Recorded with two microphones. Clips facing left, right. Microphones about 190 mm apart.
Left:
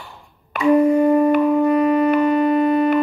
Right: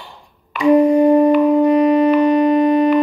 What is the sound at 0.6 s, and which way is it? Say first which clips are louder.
Music: right 3 dB; 15° right (ahead or behind).